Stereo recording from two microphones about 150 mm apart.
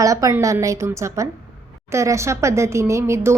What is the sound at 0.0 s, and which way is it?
A woman's voice, 20° right (ahead or behind).